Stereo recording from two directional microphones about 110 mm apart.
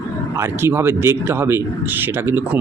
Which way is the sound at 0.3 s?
20° right (ahead or behind).